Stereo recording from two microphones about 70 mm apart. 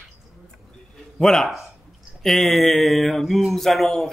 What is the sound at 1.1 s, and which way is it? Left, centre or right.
Speech, centre.